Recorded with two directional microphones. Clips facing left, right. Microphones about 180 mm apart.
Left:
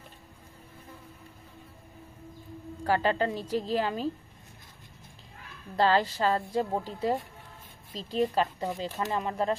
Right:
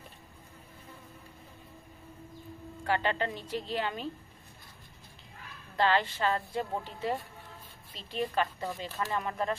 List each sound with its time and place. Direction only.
2.8 s a woman's voice: 35° left (ahead or behind)
5.8 s a woman's voice: 35° left (ahead or behind)